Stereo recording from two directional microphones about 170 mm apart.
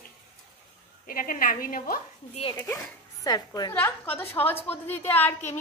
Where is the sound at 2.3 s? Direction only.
35° left (ahead or behind).